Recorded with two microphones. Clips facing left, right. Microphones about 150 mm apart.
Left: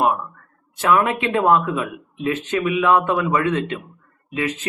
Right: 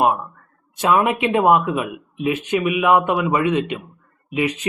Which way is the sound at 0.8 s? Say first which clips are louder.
Right 1 dB; 20° right (ahead or behind).